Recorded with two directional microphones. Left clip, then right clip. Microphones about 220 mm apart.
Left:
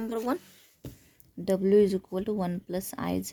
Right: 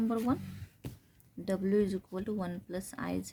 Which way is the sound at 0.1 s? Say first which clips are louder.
Left 6 dB; 50° left (ahead or behind).